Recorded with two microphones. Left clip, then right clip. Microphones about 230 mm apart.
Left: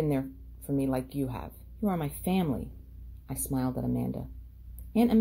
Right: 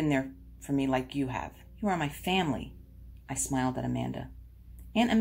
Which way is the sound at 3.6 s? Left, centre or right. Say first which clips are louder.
Even; left.